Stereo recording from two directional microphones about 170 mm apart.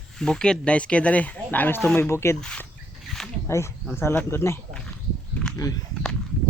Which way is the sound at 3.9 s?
10° left (ahead or behind).